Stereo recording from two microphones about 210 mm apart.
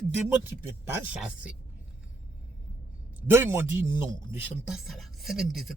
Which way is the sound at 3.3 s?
10° right (ahead or behind).